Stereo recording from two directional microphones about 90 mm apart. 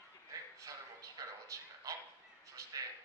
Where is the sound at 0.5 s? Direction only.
40° right (ahead or behind).